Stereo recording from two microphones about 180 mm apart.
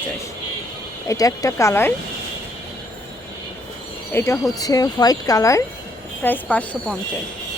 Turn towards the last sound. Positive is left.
turn(degrees=10)  # may be behind; listen again after turning